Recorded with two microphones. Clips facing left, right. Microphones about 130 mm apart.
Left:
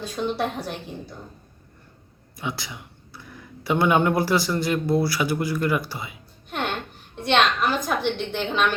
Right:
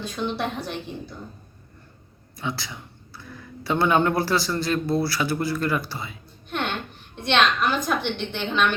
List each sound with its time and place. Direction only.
0.2 s a woman's voice: 5° left (ahead or behind)
2.3 s speech: 15° left (ahead or behind)
6.5 s a sound: 5° left (ahead or behind)
7.2 s a woman's voice: 5° left (ahead or behind)